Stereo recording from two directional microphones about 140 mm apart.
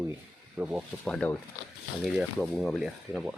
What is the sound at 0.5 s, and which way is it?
Speech, 10° right (ahead or behind).